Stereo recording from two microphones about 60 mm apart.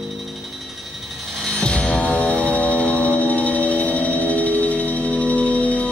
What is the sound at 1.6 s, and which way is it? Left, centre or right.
Music, centre.